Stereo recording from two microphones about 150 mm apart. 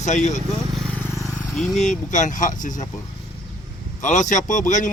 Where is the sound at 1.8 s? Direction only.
55° left (ahead or behind).